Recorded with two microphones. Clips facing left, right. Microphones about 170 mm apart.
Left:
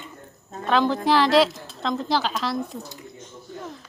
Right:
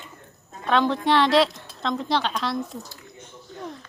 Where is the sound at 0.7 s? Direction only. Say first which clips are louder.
Left 1 dB; centre (ahead or behind).